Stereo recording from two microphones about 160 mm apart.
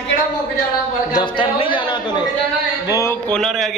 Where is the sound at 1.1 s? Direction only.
30° left (ahead or behind).